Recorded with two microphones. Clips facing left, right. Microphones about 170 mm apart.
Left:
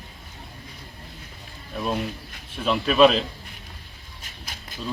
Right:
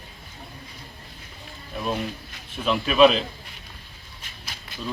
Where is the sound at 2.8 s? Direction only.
5° right (ahead or behind).